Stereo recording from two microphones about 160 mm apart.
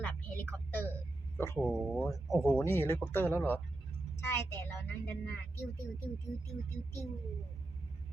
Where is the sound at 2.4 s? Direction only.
15° left (ahead or behind).